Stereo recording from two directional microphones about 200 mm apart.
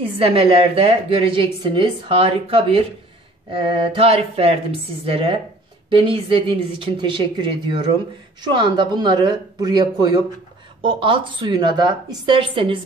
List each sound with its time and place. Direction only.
0.2 s a woman's voice: 25° right (ahead or behind)